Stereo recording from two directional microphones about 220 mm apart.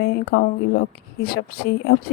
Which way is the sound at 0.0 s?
45° left (ahead or behind).